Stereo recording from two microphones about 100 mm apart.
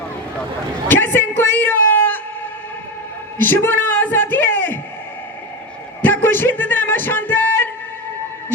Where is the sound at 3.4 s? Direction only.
20° left (ahead or behind).